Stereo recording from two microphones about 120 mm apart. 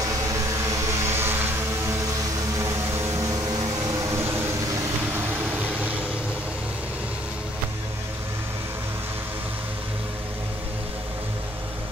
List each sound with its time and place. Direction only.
0.0 s vehicle: 25° right (ahead or behind)